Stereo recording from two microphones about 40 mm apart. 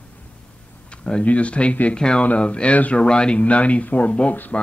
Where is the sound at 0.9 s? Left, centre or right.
Left.